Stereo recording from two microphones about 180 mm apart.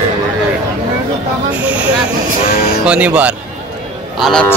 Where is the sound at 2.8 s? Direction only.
5° right (ahead or behind).